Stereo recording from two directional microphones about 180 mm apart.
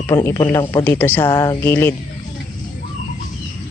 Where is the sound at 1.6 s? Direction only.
10° left (ahead or behind).